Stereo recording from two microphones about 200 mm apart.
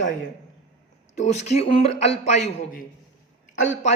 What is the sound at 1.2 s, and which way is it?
Speech, 35° left (ahead or behind).